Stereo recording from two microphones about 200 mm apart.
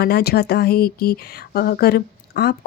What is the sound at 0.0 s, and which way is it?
Speech, 50° left (ahead or behind).